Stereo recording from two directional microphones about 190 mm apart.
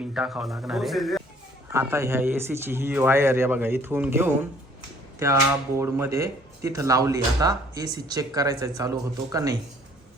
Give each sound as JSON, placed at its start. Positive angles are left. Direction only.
{"t": 0.0, "sound": "speech", "side_deg": -5}
{"t": 1.7, "sound": "speech", "side_deg": -15}